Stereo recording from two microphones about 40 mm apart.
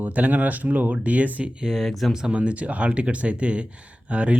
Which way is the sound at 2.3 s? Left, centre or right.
Right.